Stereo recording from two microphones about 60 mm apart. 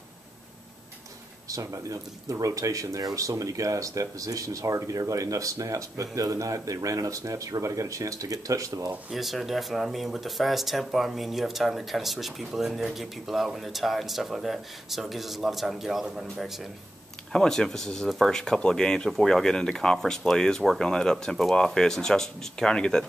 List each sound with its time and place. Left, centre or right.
1.5 s speech: right
9.1 s speech: centre
17.3 s speech: centre